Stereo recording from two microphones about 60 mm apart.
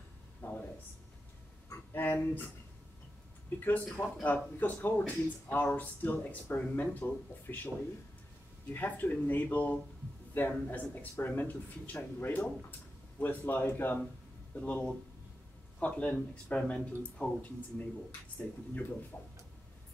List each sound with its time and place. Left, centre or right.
0.4 s a sound: left
2.0 s speech: left
3.5 s speech: left
8.7 s speech: left
14.5 s speech: left